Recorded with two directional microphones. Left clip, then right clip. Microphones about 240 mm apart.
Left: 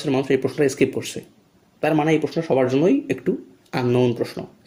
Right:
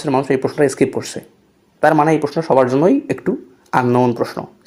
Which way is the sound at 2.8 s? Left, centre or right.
Centre.